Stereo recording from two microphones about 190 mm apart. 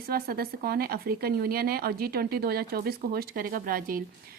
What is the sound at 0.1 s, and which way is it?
A woman's voice, 50° right (ahead or behind).